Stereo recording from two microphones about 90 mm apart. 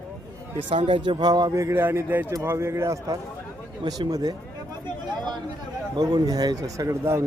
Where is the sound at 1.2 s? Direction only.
50° right (ahead or behind).